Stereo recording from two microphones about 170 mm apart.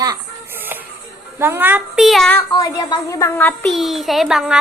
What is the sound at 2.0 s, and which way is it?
Speech, centre (ahead or behind).